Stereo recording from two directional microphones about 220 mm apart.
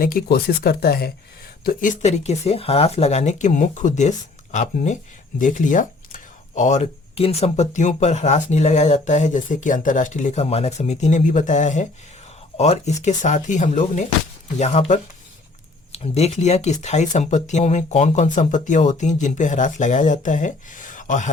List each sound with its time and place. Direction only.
0.0 s speech: 40° left (ahead or behind)